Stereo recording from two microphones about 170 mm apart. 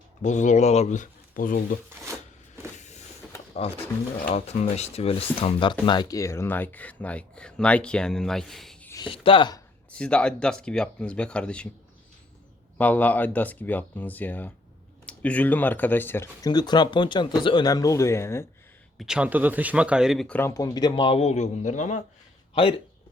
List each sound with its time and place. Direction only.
0.2 s speech: 45° left (ahead or behind)
2.7 s vehicle: 45° left (ahead or behind)
3.6 s speech: 35° left (ahead or behind); by 8.9 s centre (ahead or behind)
8.9 s speech: 25° left (ahead or behind)
9.9 s speech: 5° left (ahead or behind)
12.7 s speech: 10° left (ahead or behind)
18.9 s speech: 5° right (ahead or behind)
20.5 s speech: 20° left (ahead or behind); by 22.0 s 45° left (ahead or behind)